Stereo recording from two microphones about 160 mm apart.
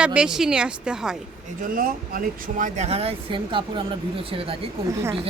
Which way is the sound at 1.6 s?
60° right (ahead or behind).